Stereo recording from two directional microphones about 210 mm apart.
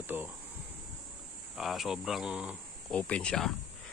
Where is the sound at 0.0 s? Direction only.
10° right (ahead or behind).